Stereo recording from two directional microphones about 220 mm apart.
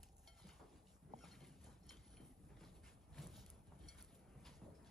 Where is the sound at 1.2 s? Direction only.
Centre (ahead or behind).